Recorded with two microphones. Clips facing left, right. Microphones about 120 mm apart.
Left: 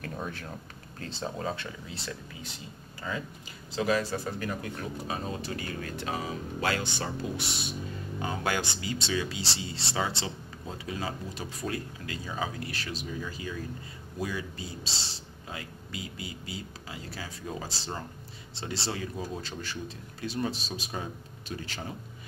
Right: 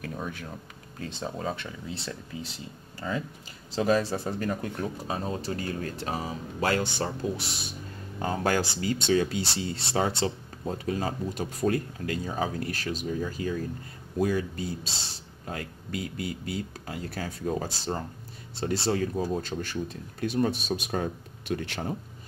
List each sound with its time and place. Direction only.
1.2 s speech: 10° right (ahead or behind)
3.7 s speech: 35° right (ahead or behind); by 21.9 s 60° right (ahead or behind)